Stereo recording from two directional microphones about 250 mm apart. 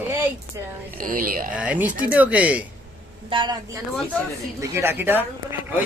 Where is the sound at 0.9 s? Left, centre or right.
Right.